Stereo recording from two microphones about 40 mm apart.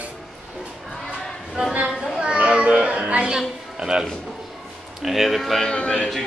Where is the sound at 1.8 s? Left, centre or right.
Right.